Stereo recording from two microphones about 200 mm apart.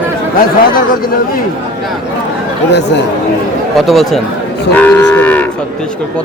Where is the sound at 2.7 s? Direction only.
60° left (ahead or behind).